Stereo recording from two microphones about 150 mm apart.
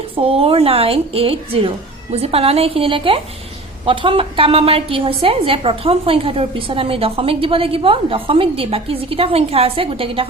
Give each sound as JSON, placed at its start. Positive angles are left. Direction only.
{"t": 0.2, "sound": "a woman's voice", "side_deg": -40}